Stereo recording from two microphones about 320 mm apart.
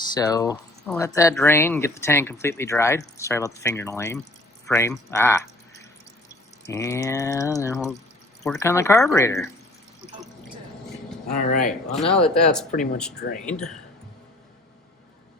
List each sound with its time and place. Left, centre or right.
0.1 s speech: centre
6.7 s speech: centre
11.3 s speech: left
11.9 s speech: centre
13.1 s speech: left